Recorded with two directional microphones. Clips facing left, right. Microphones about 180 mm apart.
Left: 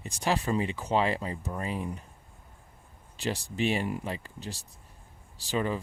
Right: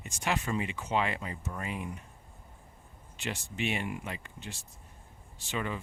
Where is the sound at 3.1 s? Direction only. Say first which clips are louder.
Left 5 dB; 35° left (ahead or behind).